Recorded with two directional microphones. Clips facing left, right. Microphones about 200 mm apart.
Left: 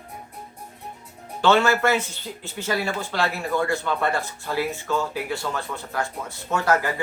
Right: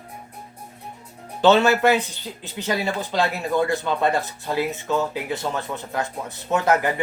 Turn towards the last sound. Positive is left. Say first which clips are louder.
# right 2 dB
turn(degrees=-20)  # may be behind; listen again after turning